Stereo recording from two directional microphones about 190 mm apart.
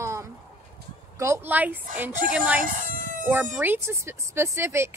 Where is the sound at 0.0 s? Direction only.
15° right (ahead or behind).